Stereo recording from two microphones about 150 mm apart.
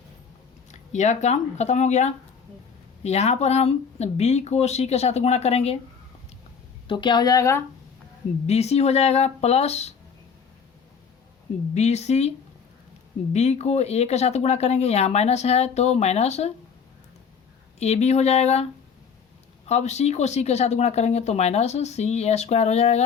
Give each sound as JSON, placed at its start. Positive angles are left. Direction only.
{"t": 0.7, "sound": "speech", "side_deg": 50}
{"t": 6.8, "sound": "speech", "side_deg": 30}
{"t": 8.4, "sound": "speech", "side_deg": 45}
{"t": 11.7, "sound": "speech", "side_deg": 50}
{"t": 13.3, "sound": "speech", "side_deg": 45}
{"t": 17.7, "sound": "speech", "side_deg": 45}